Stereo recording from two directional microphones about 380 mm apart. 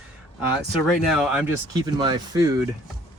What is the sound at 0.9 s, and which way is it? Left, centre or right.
Speech, centre.